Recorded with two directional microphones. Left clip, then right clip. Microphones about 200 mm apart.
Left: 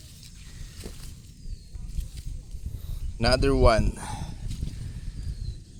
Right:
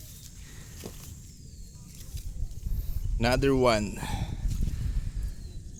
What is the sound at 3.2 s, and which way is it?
Speech, 10° right (ahead or behind).